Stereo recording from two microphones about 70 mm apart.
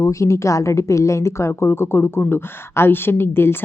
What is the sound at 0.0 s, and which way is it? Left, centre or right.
A woman's voice, left.